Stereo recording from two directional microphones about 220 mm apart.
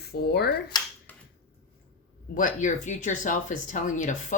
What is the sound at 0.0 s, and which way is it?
Speech, 45° left (ahead or behind).